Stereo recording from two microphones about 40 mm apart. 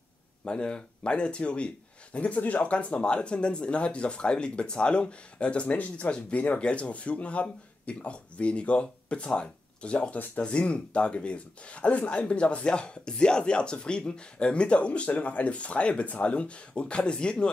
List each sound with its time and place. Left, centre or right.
0.5 s speech: left
2.3 s speech: left
6.6 s speech: left
10.1 s speech: left
10.4 s speech: left